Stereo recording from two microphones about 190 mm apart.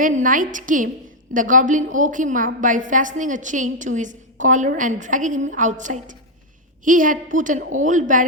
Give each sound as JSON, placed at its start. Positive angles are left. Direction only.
{"t": 0.0, "sound": "a woman's voice", "side_deg": -45}